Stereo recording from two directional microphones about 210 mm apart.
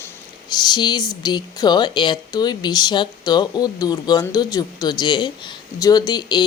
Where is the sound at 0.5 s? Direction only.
20° left (ahead or behind).